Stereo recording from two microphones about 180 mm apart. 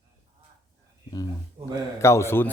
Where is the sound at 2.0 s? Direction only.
15° left (ahead or behind).